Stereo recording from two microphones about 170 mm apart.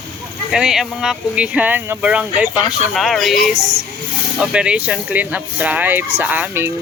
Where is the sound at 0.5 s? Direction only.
5° right (ahead or behind).